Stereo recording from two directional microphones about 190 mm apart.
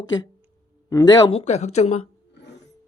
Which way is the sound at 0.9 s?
20° left (ahead or behind).